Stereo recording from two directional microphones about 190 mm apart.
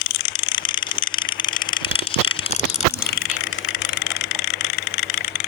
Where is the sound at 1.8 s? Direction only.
30° left (ahead or behind).